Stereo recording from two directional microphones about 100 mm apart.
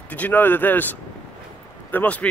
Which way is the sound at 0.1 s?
15° left (ahead or behind).